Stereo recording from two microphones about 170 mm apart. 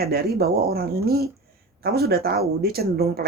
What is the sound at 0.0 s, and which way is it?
Speech, 65° right (ahead or behind).